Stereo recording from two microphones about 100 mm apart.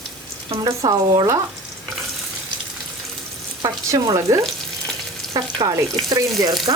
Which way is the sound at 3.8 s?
35° right (ahead or behind).